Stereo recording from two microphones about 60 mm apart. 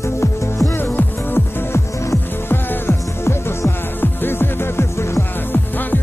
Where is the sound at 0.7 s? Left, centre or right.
Left.